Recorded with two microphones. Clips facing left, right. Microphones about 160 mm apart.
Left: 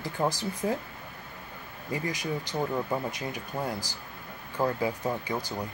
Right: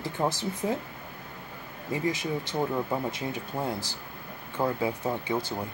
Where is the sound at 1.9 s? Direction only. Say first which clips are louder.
Right 3 dB; 25° right (ahead or behind).